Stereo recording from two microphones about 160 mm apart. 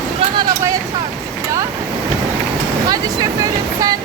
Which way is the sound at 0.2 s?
25° right (ahead or behind).